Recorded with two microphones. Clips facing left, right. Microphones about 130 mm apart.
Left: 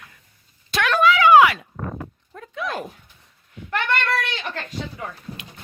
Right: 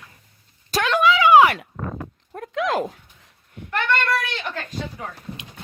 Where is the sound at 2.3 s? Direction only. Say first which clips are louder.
Right 6 dB; 80° right.